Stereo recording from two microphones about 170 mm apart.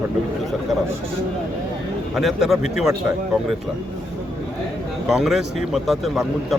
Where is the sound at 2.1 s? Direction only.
Centre (ahead or behind).